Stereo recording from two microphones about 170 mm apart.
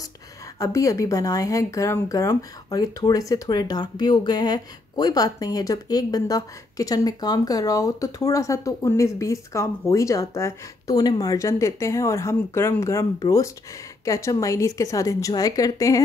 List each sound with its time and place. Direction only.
0.6 s speech: 20° left (ahead or behind)